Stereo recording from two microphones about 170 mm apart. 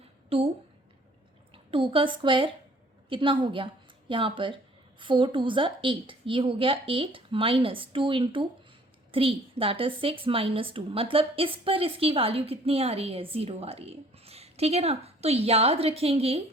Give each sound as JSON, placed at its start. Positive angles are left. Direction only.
{"t": 0.3, "sound": "a woman's voice", "side_deg": -35}
{"t": 1.7, "sound": "a woman's voice", "side_deg": -30}